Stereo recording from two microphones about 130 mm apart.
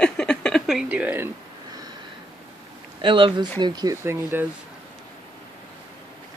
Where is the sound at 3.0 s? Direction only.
40° right (ahead or behind).